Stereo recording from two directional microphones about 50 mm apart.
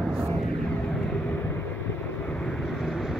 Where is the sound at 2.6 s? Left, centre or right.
Centre.